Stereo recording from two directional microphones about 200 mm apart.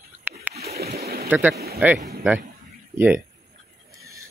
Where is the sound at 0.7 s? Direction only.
50° right (ahead or behind).